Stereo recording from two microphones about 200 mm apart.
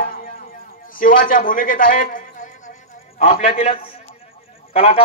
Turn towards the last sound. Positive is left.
turn(degrees=30)  # may be behind; listen again after turning